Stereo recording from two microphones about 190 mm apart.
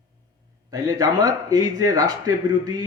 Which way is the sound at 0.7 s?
20° right (ahead or behind).